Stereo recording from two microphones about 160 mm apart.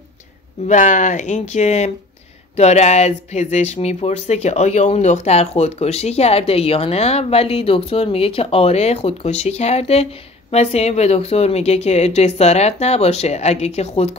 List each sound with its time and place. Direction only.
0.7 s speech: 50° left (ahead or behind)